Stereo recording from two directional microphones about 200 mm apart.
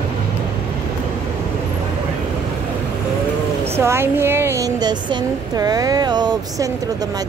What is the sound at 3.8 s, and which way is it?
A woman's voice, 10° right (ahead or behind).